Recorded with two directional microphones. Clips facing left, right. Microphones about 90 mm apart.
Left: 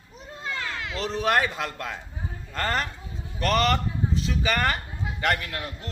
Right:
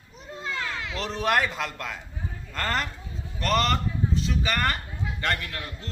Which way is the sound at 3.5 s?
Centre (ahead or behind).